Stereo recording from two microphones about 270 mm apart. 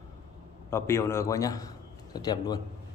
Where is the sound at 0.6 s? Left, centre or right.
Centre.